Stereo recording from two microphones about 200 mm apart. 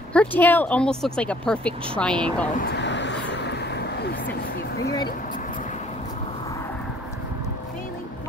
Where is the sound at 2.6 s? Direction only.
60° left (ahead or behind).